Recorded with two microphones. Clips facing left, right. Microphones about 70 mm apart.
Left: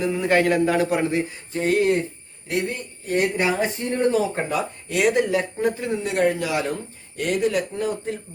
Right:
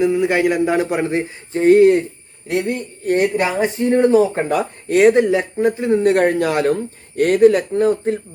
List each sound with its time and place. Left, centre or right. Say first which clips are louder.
0.1 s a man's voice: right 3 dB; centre
2.6 s speech: right 9 dB; right
3.3 s a man's voice: right 4 dB; right
4.4 s a man's voice: right 6 dB; right
5.9 s speech: right 10 dB; right